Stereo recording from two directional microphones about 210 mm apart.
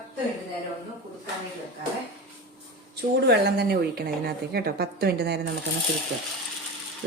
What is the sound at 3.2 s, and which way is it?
A woman's voice, 50° right (ahead or behind).